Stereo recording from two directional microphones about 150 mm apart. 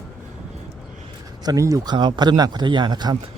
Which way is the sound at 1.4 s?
20° right (ahead or behind).